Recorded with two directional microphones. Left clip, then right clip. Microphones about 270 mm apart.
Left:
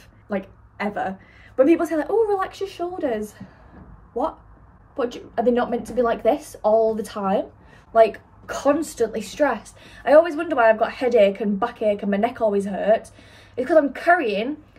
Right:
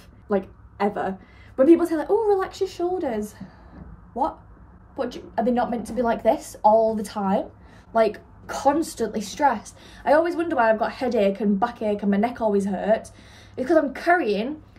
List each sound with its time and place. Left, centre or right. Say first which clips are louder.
0.3 s a woman's voice: right 4 dB; centre
4.9 s a woman's voice: left 2 dB; centre
6.7 s speech: left 1 dB; centre
7.0 s a woman's voice: left 2 dB; centre